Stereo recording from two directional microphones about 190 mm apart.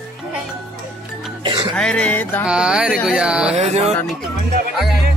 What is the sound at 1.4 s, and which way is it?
Speech, 25° right (ahead or behind).